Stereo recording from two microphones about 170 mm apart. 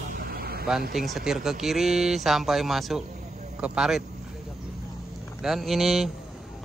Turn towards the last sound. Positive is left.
turn(degrees=0)  # may be behind; listen again after turning